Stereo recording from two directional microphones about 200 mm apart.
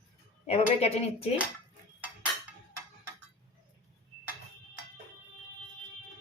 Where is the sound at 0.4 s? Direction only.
30° left (ahead or behind).